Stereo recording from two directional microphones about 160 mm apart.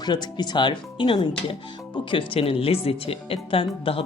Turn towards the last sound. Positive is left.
turn(degrees=35)  # may be behind; listen again after turning